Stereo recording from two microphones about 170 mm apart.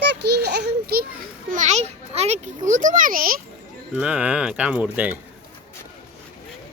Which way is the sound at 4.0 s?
5° right (ahead or behind).